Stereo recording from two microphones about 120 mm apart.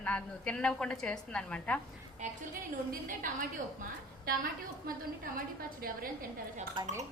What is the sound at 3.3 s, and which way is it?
Speech, 90° right.